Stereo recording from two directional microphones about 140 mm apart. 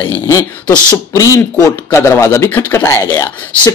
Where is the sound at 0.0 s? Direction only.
20° left (ahead or behind).